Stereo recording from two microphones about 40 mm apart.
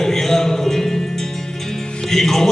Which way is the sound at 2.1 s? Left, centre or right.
Centre.